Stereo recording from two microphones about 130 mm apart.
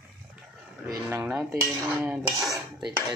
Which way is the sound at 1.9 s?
5° right (ahead or behind).